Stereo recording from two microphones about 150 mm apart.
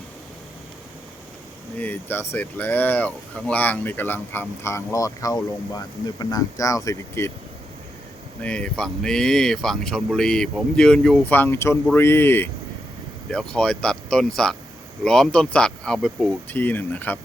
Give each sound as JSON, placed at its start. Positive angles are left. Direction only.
{"t": 1.8, "sound": "speech", "side_deg": 15}
{"t": 8.4, "sound": "speech", "side_deg": 10}
{"t": 13.3, "sound": "speech", "side_deg": 5}